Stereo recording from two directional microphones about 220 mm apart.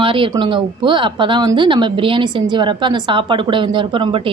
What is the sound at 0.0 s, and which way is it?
Speech, 25° right (ahead or behind).